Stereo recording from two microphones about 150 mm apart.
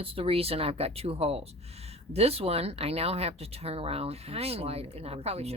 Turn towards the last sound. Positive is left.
turn(degrees=-45)  # may be behind; listen again after turning